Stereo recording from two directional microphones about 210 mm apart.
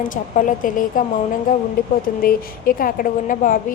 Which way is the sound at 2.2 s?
40° left (ahead or behind).